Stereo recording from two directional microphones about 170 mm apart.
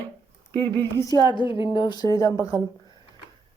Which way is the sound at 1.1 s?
25° left (ahead or behind).